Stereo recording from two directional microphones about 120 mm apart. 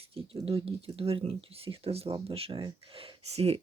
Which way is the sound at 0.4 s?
50° right (ahead or behind).